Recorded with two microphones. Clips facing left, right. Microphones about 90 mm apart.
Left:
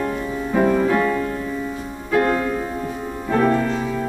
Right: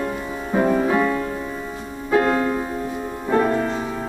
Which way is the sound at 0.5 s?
20° right (ahead or behind).